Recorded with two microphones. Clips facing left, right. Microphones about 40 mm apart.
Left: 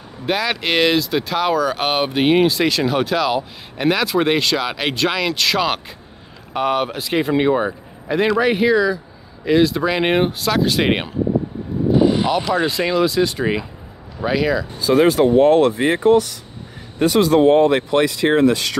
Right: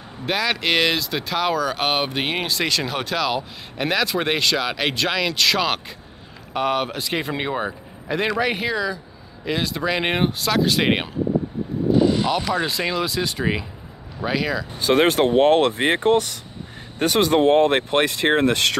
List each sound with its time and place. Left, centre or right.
0.3 s speech: centre
11.9 s vehicle: centre
12.3 s speech: centre
14.8 s speech: right